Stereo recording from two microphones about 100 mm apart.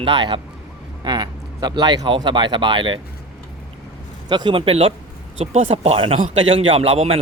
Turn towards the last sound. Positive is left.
turn(degrees=-75)  # may be behind; listen again after turning